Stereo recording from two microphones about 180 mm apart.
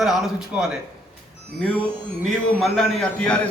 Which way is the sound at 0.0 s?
Centre (ahead or behind).